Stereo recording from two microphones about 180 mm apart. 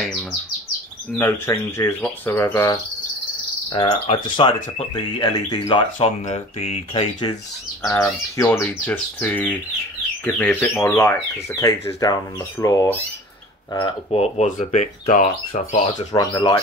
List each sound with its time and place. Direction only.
1.1 s speech: 15° left (ahead or behind)
3.7 s speech: 30° left (ahead or behind)
6.2 s speech: 35° left (ahead or behind)
7.8 s speech: 15° left (ahead or behind)
13.7 s speech: 30° left (ahead or behind); by 16.1 s 45° left (ahead or behind)
16.1 s speech: 20° left (ahead or behind)